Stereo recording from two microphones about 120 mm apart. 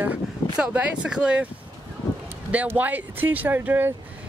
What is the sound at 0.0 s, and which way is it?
Speech, 15° right (ahead or behind).